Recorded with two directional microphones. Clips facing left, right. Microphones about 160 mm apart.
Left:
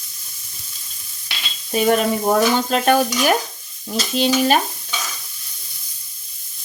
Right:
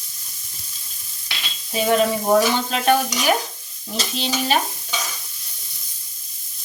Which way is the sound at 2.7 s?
45° left (ahead or behind).